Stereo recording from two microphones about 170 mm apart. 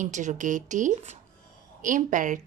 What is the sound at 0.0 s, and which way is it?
Speech, 45° right (ahead or behind).